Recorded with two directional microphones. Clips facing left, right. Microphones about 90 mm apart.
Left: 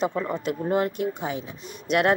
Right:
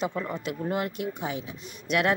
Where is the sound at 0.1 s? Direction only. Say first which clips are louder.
Left 4 dB; 30° left (ahead or behind).